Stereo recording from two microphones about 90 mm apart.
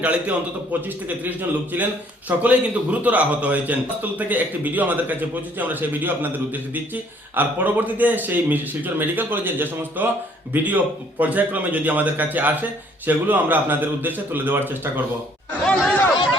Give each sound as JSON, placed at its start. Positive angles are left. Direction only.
{"t": 0.0, "sound": "a man's voice", "side_deg": -15}
{"t": 15.6, "sound": "speech", "side_deg": 5}